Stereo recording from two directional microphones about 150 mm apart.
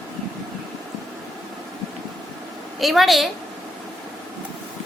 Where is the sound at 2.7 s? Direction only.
Centre (ahead or behind).